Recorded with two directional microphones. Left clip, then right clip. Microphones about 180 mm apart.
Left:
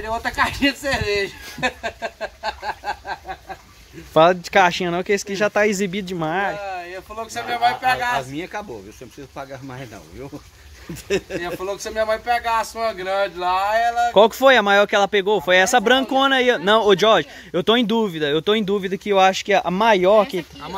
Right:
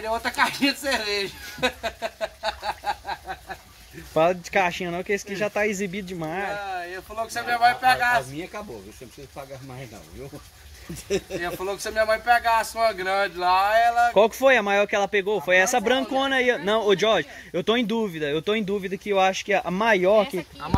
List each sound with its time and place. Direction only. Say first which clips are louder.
0.0 s speech: left 2 dB; 5° left (ahead or behind)
4.1 s speech: left 7 dB; 30° left (ahead or behind)
6.5 s speech: left 2 dB; 10° left (ahead or behind)
11.1 s speech: left 4 dB; 40° left (ahead or behind)
11.4 s speech: left 2 dB; 10° left (ahead or behind)
14.1 s speech: left 5 dB; 25° left (ahead or behind); by 20.7 s 10° left (ahead or behind)